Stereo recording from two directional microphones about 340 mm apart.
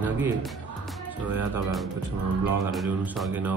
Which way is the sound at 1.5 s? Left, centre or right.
Centre.